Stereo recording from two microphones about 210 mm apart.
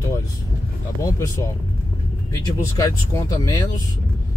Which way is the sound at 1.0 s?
15° left (ahead or behind).